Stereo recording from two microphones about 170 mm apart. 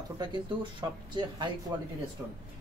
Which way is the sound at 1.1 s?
25° right (ahead or behind).